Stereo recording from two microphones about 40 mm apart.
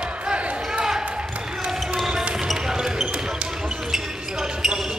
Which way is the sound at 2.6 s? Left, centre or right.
Centre.